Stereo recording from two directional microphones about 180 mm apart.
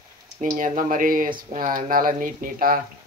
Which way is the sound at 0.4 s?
45° right (ahead or behind).